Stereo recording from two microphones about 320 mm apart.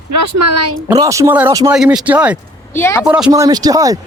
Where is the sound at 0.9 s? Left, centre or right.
Centre.